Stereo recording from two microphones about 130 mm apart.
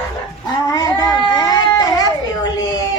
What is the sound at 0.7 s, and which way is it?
Speech, 30° left (ahead or behind).